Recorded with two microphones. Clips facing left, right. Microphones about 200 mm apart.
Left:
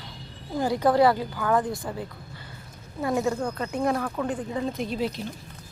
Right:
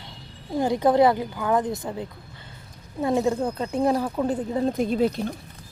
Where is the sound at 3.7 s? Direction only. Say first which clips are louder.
Right 4 dB; 30° right (ahead or behind).